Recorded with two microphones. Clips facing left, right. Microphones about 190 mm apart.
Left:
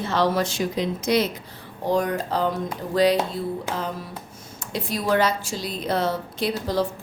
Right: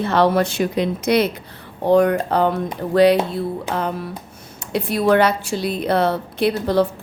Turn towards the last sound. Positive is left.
turn(degrees=-65)  # may be behind; listen again after turning